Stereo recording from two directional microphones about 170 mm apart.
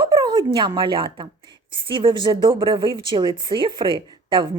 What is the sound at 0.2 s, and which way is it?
A woman's voice, 25° right (ahead or behind).